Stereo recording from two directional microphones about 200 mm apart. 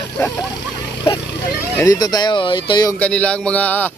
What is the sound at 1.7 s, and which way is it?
Speech, 15° left (ahead or behind).